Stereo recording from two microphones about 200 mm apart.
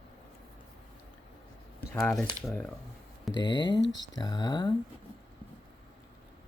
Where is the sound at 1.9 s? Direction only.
10° left (ahead or behind).